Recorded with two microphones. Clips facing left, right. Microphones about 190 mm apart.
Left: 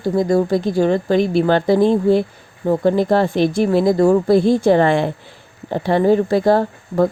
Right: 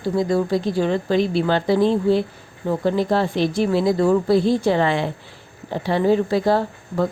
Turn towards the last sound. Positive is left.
turn(degrees=50)  # may be behind; listen again after turning